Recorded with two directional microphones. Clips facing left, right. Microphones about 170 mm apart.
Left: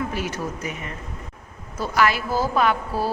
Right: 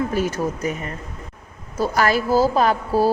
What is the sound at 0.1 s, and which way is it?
A woman's voice, 40° right (ahead or behind).